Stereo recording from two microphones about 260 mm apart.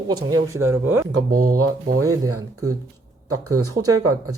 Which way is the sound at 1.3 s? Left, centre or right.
Right.